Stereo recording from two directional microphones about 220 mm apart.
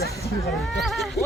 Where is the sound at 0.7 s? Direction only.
Centre (ahead or behind).